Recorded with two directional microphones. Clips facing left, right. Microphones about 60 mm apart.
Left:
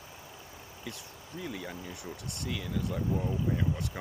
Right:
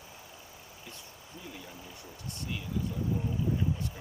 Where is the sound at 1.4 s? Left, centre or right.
Left.